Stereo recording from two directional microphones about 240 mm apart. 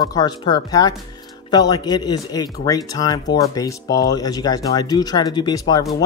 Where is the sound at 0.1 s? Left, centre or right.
Centre.